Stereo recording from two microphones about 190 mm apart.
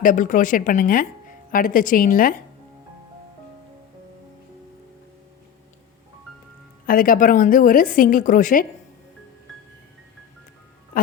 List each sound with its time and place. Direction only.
0.0 s a woman's voice: 45° left (ahead or behind)
6.8 s a woman's voice: 50° left (ahead or behind)
10.9 s music: 45° left (ahead or behind)